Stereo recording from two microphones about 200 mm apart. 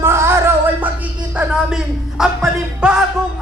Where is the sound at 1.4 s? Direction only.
5° right (ahead or behind).